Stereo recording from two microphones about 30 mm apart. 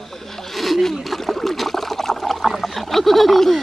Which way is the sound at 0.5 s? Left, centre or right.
Centre.